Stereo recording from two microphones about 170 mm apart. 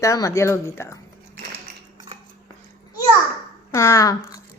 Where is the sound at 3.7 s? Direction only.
15° left (ahead or behind).